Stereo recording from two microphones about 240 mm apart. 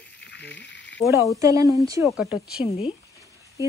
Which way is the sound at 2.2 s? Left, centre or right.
Left.